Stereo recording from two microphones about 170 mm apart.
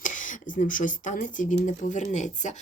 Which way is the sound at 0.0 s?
50° left (ahead or behind).